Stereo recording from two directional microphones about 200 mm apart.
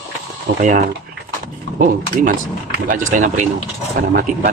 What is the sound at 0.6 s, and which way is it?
Speech, 35° right (ahead or behind).